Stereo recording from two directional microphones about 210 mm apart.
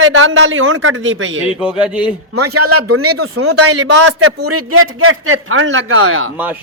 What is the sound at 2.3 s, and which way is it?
Speech, 90° right.